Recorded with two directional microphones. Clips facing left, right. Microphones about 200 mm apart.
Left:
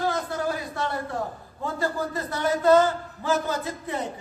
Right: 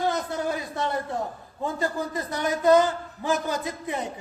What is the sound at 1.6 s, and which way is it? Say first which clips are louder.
A man's voice: even; 15° right (ahead or behind).